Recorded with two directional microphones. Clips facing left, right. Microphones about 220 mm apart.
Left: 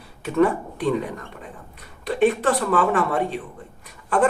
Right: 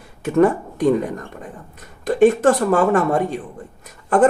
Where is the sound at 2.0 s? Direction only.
45° right (ahead or behind).